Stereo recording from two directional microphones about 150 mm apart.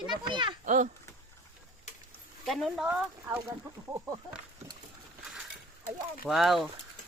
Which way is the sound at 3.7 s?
20° right (ahead or behind).